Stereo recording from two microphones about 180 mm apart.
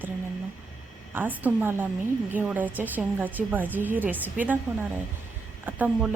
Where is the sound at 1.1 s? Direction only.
10° right (ahead or behind).